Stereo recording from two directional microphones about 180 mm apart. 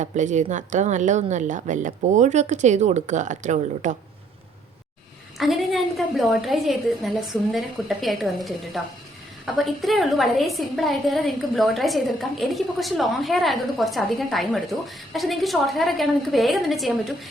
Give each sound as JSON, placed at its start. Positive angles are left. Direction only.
{"t": 0.0, "sound": "a woman's voice", "side_deg": -40}
{"t": 5.4, "sound": "a woman's voice", "side_deg": 0}